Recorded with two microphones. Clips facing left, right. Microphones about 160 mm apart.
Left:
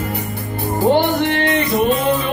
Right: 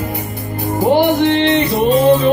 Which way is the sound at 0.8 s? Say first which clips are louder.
Right 3 dB; 25° right (ahead or behind).